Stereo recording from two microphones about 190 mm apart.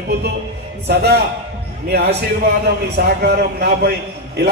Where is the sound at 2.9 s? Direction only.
60° right (ahead or behind).